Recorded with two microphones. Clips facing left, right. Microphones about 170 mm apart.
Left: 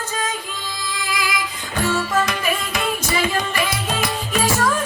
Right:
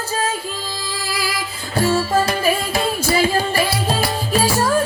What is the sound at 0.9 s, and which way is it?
Music, 35° right (ahead or behind).